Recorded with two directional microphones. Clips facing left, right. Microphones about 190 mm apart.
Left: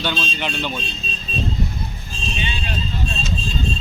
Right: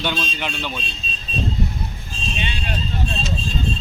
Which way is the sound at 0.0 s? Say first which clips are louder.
Even; 5° right (ahead or behind).